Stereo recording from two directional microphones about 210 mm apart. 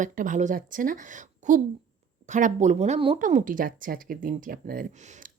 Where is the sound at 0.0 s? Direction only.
35° right (ahead or behind).